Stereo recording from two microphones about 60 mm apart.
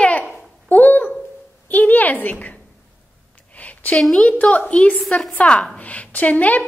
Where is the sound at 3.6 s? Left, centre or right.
Left.